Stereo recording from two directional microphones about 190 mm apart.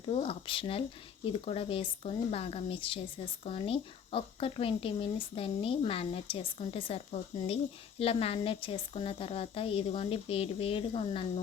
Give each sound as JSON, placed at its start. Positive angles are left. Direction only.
{"t": 0.1, "sound": "speech", "side_deg": 30}